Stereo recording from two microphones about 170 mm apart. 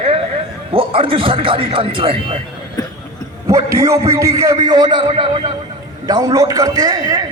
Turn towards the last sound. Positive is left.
turn(degrees=-20)  # may be behind; listen again after turning